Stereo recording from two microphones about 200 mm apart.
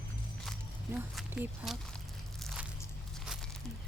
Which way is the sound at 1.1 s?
Centre (ahead or behind).